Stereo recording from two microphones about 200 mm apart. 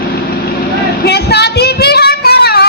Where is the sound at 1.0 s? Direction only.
55° left (ahead or behind).